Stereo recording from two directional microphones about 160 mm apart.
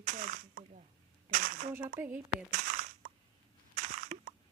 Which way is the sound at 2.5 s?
55° right (ahead or behind).